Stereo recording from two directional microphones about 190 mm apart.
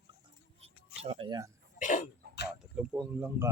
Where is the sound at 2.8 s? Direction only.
5° right (ahead or behind).